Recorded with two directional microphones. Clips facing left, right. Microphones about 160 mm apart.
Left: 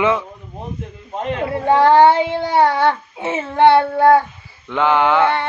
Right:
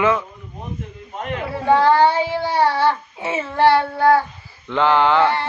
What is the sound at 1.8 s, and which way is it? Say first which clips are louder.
Child singing: left 4 dB; 20° left (ahead or behind).